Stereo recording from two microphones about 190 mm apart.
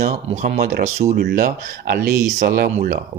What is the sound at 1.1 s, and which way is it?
Speech, 55° right (ahead or behind).